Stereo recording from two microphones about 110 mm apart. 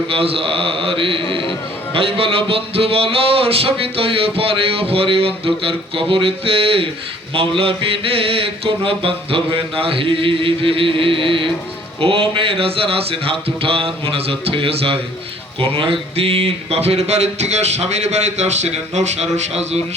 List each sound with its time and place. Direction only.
0.1 s music: 60° right (ahead or behind)
7.3 s mantra: 55° right (ahead or behind)
11.9 s music: 55° right (ahead or behind)
15.6 s a man's voice: 55° right (ahead or behind); by 19.8 s 80° right